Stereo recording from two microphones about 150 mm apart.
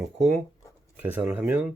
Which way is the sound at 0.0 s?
Centre (ahead or behind).